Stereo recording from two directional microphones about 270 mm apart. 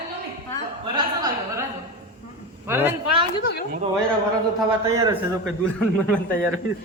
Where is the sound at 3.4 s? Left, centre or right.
Left.